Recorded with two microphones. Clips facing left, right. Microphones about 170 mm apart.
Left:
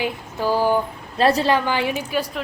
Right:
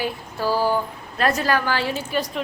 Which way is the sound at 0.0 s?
20° left (ahead or behind).